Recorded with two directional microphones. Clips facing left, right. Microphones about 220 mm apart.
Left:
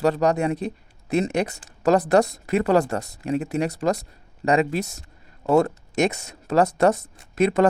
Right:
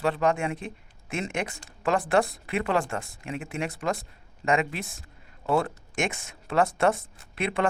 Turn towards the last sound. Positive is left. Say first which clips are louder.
# left 8 dB
turn(degrees=40)  # may be behind; listen again after turning